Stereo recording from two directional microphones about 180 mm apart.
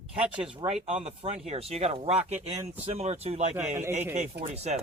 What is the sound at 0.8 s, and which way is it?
Speech, 35° right (ahead or behind).